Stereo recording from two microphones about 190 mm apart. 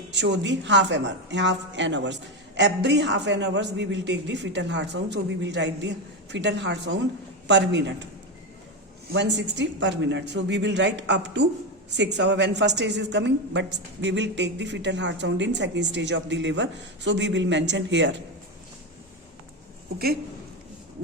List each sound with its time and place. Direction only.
0.1 s a woman's voice: 70° right (ahead or behind)
9.1 s a woman's voice: 65° right (ahead or behind)